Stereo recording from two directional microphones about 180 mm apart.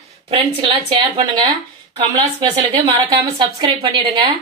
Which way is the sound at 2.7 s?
30° right (ahead or behind).